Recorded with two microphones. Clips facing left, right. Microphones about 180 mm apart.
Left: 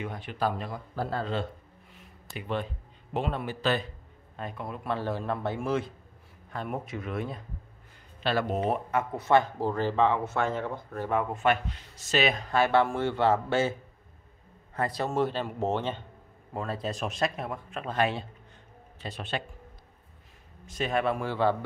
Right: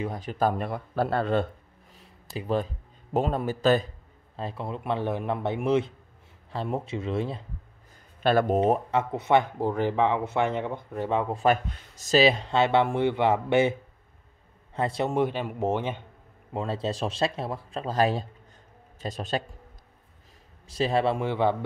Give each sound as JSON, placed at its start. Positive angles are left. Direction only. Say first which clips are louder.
{"t": 0.0, "sound": "speech", "louder": "right 4 dB", "side_deg": -35}
{"t": 2.0, "sound": "speech", "louder": "right 5 dB", "side_deg": -35}
{"t": 4.4, "sound": "speech", "louder": "right 3 dB", "side_deg": -30}
{"t": 8.2, "sound": "speech", "louder": "right 6 dB", "side_deg": -50}
{"t": 8.9, "sound": "a man's voice", "louder": "right 1 dB", "side_deg": -20}
{"t": 16.5, "sound": "speech", "louder": "right 4 dB", "side_deg": -25}
{"t": 20.6, "sound": "speech", "louder": "right 4 dB", "side_deg": -30}